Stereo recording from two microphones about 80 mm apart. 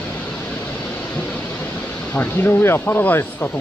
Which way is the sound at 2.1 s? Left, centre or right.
Left.